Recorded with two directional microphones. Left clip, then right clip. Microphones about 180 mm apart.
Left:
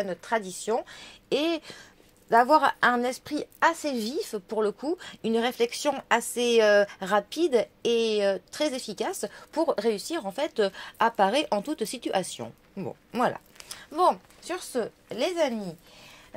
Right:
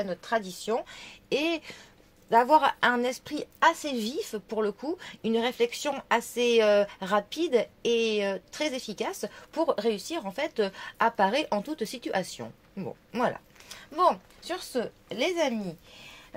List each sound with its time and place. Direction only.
0.0 s a woman's voice: 35° left (ahead or behind)